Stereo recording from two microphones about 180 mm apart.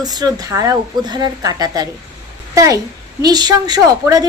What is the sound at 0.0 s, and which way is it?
A woman's voice, 20° right (ahead or behind).